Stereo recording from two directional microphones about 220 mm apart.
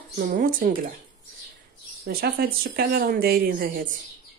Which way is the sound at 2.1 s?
45° right (ahead or behind).